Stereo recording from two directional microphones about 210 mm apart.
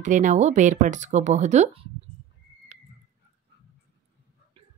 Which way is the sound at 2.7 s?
35° right (ahead or behind).